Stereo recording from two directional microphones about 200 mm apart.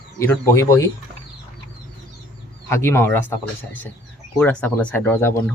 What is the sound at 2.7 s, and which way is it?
Speech, 10° left (ahead or behind).